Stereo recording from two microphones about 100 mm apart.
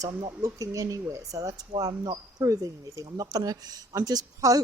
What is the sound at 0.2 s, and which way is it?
Speech, 40° right (ahead or behind).